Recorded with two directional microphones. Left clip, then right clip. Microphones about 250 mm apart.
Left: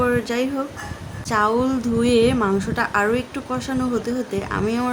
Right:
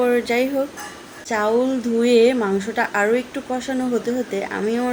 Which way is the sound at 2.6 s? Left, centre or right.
Left.